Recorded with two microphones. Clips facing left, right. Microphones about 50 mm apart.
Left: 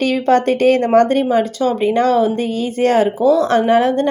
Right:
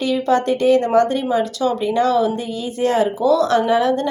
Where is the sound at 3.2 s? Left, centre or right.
Left.